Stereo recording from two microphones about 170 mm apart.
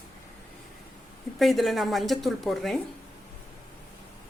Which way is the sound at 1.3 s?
Centre (ahead or behind).